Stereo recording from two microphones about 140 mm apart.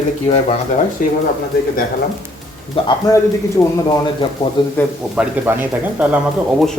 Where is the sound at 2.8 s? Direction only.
40° left (ahead or behind).